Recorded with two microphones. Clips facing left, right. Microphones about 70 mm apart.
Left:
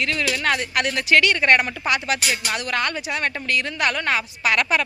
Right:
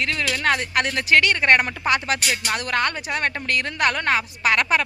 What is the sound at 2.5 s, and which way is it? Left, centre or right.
Speech, right.